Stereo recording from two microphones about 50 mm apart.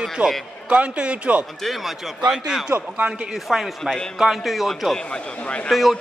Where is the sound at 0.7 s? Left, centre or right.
Right.